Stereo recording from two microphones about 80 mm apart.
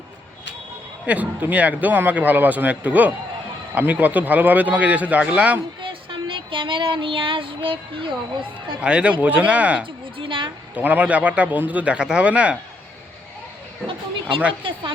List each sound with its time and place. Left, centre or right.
1.0 s a man's voice: centre
5.8 s child singing: right
8.8 s a man's voice: centre
10.2 s a child's voice: right
10.8 s a man's voice: right
14.6 s a child's voice: right